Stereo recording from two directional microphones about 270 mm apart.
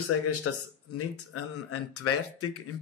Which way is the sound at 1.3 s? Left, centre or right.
Left.